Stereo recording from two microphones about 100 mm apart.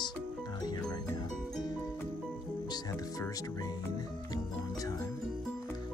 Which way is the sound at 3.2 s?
35° left (ahead or behind).